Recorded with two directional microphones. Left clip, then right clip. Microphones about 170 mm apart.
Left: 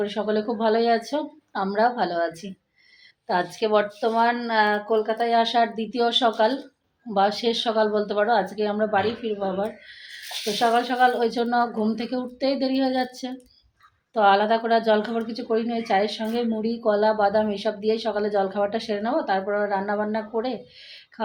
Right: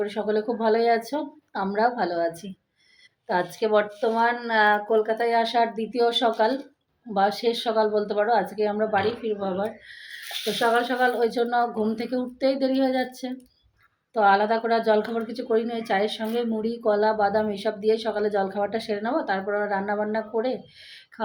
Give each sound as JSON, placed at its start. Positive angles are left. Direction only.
{"t": 0.0, "sound": "speech", "side_deg": 5}